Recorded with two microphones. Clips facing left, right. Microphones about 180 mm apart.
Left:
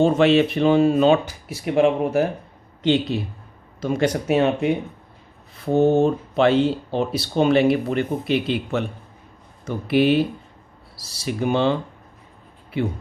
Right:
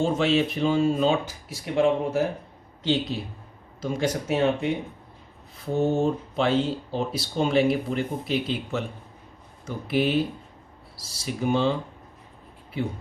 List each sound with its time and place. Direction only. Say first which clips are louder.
0.0 s speech: left 6 dB; 65° left (ahead or behind)
3.8 s speech: left 5 dB; 65° left (ahead or behind)